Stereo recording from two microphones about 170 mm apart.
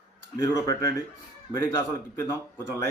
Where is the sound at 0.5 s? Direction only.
20° left (ahead or behind).